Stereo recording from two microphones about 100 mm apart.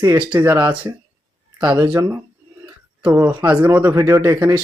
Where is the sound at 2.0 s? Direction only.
25° right (ahead or behind).